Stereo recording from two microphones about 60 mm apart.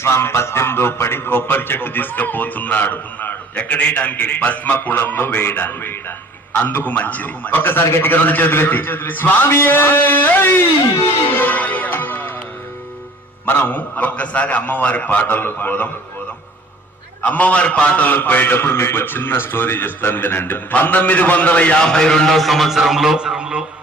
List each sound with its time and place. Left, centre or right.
0.0 s a man's voice: left
11.3 s music: left
13.4 s a man's voice: left
17.2 s a man's voice: left
21.9 s a man's voice: centre